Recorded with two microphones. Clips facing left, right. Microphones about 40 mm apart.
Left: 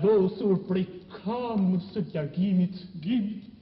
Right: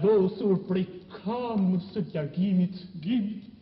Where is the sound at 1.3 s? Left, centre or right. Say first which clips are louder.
Even; centre.